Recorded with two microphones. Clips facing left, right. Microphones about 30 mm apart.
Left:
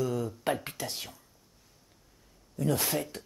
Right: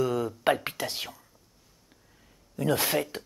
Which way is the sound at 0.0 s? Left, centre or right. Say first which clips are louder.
Right 4 dB; right.